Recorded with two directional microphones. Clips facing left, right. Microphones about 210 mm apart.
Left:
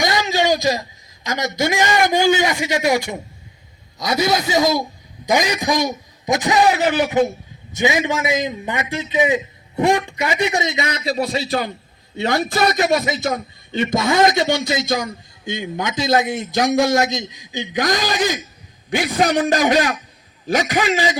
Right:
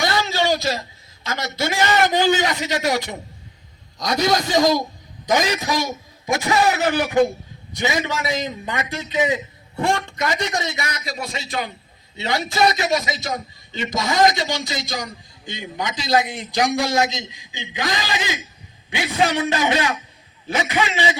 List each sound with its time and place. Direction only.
0.0 s a man's voice: 15° left (ahead or behind); by 11.7 s 35° left (ahead or behind)
12.1 s a man's voice: 50° left (ahead or behind)